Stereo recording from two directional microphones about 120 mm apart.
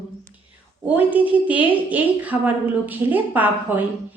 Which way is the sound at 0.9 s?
15° right (ahead or behind).